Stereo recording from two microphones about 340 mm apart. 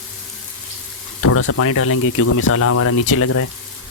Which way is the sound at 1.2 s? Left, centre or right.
Left.